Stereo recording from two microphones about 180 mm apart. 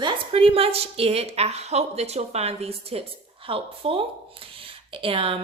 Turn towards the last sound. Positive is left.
turn(degrees=-30)  # may be behind; listen again after turning